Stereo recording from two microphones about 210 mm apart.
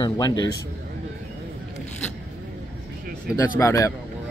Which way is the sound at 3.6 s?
15° left (ahead or behind).